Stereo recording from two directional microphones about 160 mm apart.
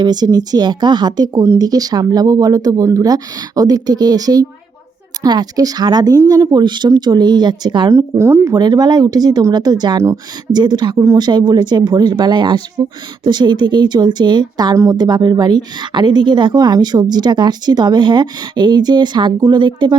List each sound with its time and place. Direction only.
0.0 s speech: 25° right (ahead or behind)